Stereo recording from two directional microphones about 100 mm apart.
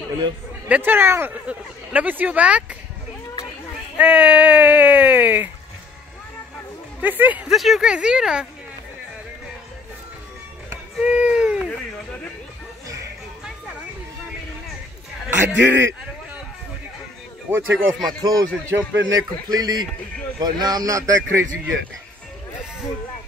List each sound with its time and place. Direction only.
0.7 s speech: 15° right (ahead or behind)
1.3 s speech: 15° right (ahead or behind)
4.0 s speech: 15° right (ahead or behind)
7.0 s speech: 15° right (ahead or behind)
7.4 s speech: centre (ahead or behind)
11.0 s speech: 10° right (ahead or behind)
15.2 s a man's voice: 20° right (ahead or behind)
18.0 s speech: 40° right (ahead or behind)